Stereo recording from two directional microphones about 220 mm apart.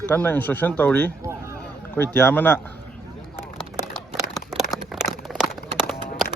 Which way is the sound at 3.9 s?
Centre (ahead or behind).